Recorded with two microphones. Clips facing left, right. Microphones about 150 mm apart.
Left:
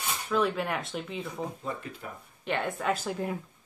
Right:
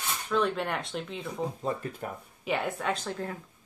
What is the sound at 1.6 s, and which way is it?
Speech, 40° right (ahead or behind).